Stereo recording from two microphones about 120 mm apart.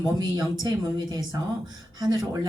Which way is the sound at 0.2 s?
35° right (ahead or behind).